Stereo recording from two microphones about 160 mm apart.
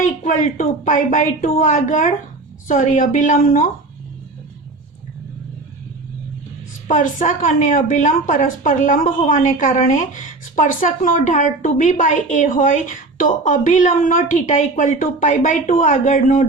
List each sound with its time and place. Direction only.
0.0 s a woman's voice: 50° left (ahead or behind)
6.8 s a woman's voice: 55° left (ahead or behind)